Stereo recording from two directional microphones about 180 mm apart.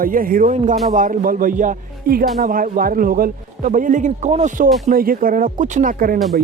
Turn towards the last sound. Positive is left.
turn(degrees=-50)  # may be behind; listen again after turning